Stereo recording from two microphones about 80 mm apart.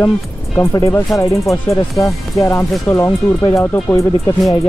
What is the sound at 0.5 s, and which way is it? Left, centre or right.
Speech, left.